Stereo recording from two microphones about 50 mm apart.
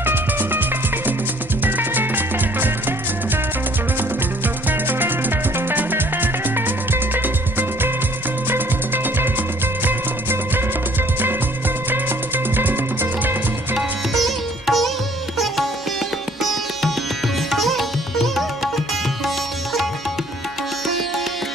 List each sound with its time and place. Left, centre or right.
0.0 s music: right
4.6 s music: right
12.5 s music: right
13.7 s sitar: centre
17.5 s sitar: centre
19.2 s music: centre